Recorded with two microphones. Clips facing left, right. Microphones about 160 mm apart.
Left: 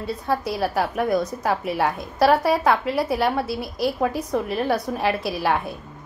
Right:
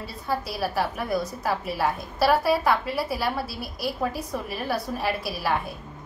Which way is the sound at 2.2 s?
20° left (ahead or behind).